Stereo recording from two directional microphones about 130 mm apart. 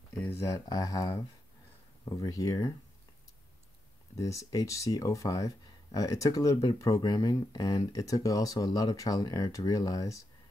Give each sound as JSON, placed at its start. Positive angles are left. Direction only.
{"t": 0.2, "sound": "speech", "side_deg": 25}
{"t": 4.2, "sound": "speech", "side_deg": 25}